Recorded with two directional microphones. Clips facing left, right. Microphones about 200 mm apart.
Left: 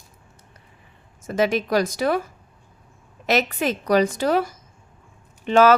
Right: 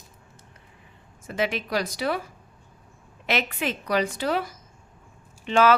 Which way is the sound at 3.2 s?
40° left (ahead or behind).